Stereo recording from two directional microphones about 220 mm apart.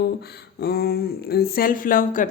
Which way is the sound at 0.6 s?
45° left (ahead or behind).